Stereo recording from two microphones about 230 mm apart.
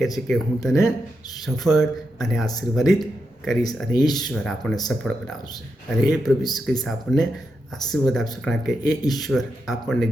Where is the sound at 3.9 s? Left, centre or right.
Centre.